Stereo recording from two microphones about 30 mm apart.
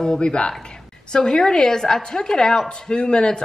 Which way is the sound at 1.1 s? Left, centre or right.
Left.